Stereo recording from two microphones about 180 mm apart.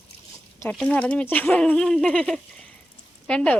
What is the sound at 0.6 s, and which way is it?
A woman's voice, 5° left (ahead or behind).